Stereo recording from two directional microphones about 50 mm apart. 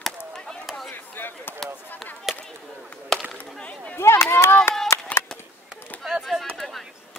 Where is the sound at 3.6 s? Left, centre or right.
Left.